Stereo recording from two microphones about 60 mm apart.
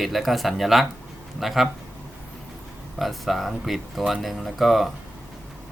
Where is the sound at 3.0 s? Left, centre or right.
Centre.